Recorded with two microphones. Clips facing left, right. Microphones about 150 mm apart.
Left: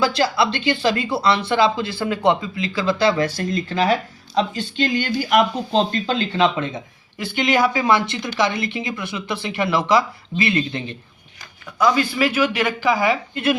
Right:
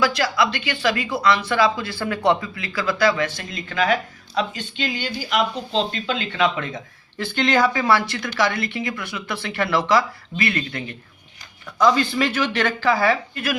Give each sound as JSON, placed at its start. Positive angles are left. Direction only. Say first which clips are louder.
{"t": 0.0, "sound": "speech", "louder": "left 2 dB", "side_deg": 30}
{"t": 7.2, "sound": "speech", "louder": "left 1 dB", "side_deg": 10}
{"t": 11.8, "sound": "speech", "louder": "even", "side_deg": 5}